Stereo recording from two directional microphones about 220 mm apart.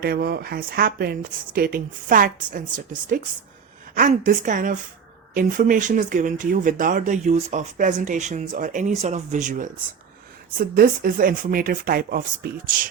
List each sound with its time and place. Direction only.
0.0 s speech: 45° right (ahead or behind)